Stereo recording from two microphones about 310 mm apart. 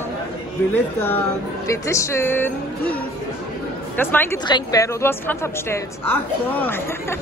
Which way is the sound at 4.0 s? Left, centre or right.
Centre.